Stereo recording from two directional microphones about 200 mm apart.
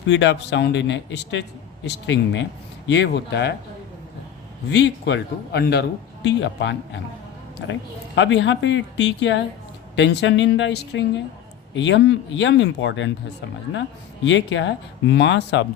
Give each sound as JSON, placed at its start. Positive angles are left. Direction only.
{"t": 0.0, "sound": "a man's voice", "side_deg": 65}
{"t": 4.7, "sound": "a man's voice", "side_deg": 60}
{"t": 6.2, "sound": "a man's voice", "side_deg": 65}
{"t": 14.3, "sound": "a man's voice", "side_deg": 65}